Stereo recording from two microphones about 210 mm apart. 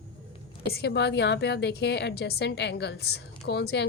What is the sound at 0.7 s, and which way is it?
A woman's voice, 50° left (ahead or behind).